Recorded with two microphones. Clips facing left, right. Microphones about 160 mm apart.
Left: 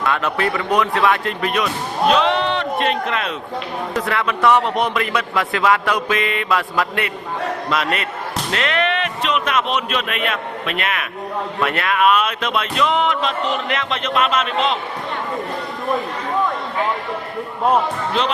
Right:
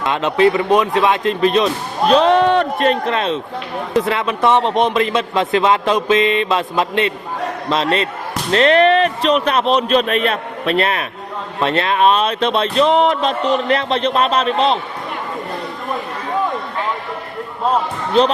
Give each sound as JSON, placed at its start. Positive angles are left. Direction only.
{"t": 0.0, "sound": "speech", "side_deg": -20}